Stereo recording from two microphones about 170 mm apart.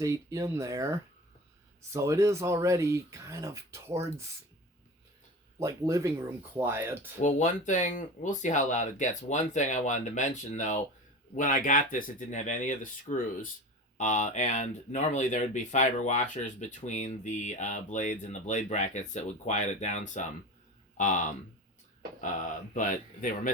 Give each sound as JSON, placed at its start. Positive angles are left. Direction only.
{"t": 0.0, "sound": "speech", "side_deg": -20}
{"t": 5.5, "sound": "speech", "side_deg": -15}
{"t": 7.2, "sound": "speech", "side_deg": 45}